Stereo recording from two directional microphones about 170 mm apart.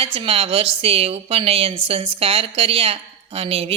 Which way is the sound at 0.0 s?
35° right (ahead or behind).